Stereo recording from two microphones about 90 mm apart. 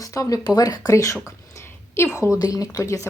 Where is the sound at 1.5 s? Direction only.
30° left (ahead or behind).